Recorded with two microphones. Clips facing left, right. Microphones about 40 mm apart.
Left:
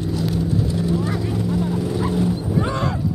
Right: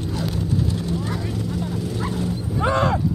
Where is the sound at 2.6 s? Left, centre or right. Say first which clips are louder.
Right 7 dB; right.